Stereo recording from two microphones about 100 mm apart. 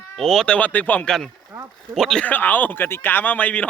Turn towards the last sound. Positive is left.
turn(degrees=15)  # may be behind; listen again after turning